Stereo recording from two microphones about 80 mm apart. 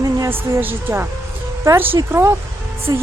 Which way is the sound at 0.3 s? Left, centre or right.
Right.